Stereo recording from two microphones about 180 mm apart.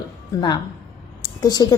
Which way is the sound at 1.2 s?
20° left (ahead or behind).